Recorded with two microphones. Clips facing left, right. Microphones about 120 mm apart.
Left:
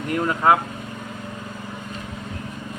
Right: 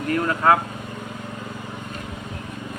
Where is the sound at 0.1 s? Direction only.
15° left (ahead or behind).